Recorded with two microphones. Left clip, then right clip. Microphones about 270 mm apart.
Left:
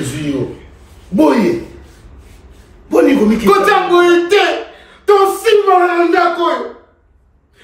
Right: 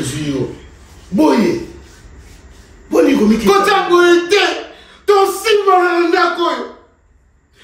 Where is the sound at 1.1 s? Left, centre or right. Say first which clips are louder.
Left 1 dB; centre.